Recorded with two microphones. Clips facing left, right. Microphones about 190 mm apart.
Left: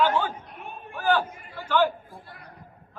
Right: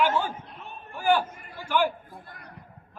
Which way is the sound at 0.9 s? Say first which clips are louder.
Right 1 dB; 10° right (ahead or behind).